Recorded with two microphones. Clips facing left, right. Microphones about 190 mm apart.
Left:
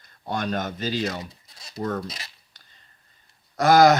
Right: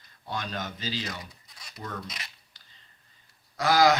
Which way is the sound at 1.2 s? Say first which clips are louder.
Left 7 dB; 25° left (ahead or behind).